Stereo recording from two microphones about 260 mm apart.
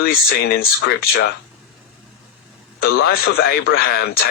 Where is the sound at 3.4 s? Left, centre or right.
Left.